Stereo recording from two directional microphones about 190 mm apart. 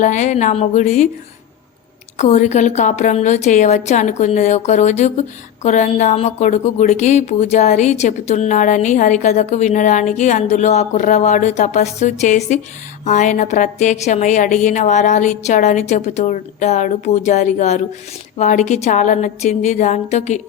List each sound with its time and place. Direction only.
0.0 s a woman's voice: 40° left (ahead or behind)
2.1 s a woman's voice: 35° left (ahead or behind)